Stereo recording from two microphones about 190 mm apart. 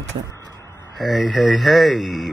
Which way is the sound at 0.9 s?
Centre (ahead or behind).